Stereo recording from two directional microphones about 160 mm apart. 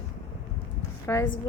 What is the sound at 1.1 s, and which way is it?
Speech, 15° left (ahead or behind).